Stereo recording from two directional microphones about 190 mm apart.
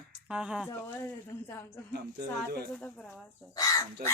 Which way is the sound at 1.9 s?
55° right (ahead or behind).